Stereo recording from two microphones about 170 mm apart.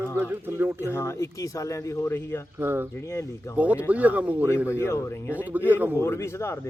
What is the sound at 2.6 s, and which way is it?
Speech, 15° right (ahead or behind).